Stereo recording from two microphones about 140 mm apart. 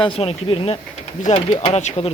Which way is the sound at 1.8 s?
50° left (ahead or behind).